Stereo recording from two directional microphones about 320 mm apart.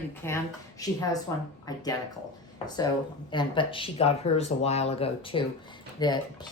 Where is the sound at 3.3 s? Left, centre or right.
Centre.